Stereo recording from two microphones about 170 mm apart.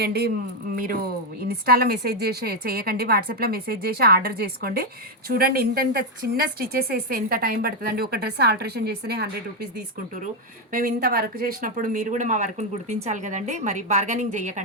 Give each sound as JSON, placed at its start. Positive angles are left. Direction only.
{"t": 0.0, "sound": "speech", "side_deg": -75}
{"t": 1.4, "sound": "a woman's voice", "side_deg": -65}
{"t": 10.7, "sound": "speech", "side_deg": -55}